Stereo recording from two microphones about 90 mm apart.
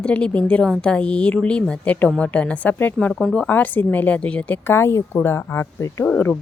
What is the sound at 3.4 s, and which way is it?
Speech, 20° left (ahead or behind).